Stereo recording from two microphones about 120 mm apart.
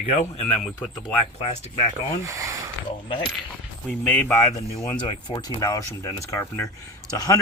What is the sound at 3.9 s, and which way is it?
Speech, 15° left (ahead or behind).